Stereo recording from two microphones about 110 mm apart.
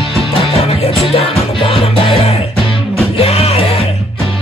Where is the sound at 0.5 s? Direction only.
60° left (ahead or behind).